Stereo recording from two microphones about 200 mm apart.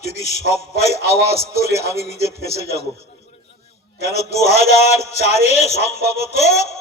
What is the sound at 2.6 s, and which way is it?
Speech, 35° left (ahead or behind).